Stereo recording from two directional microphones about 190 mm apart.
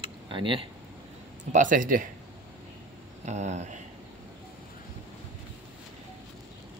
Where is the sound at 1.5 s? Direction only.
45° right (ahead or behind).